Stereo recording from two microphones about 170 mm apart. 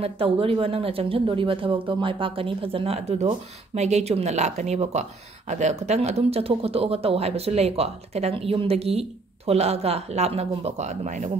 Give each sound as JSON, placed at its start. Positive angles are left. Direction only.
{"t": 0.0, "sound": "a woman's voice", "side_deg": -35}